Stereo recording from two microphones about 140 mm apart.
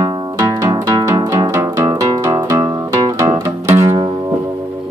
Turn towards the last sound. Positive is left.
turn(degrees=-20)  # may be behind; listen again after turning